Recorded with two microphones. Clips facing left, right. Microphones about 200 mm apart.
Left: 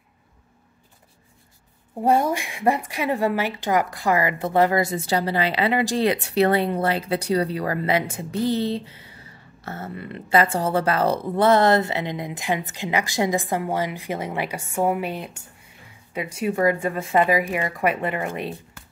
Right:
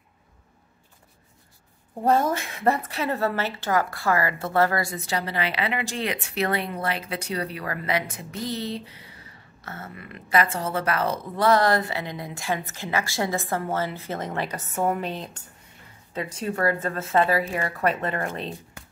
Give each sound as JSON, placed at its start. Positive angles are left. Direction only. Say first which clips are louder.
{"t": 2.0, "sound": "a woman's voice", "louder": "left 2 dB", "side_deg": 10}